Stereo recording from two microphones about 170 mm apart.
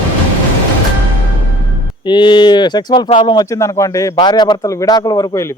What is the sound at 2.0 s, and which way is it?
Speech, 30° left (ahead or behind).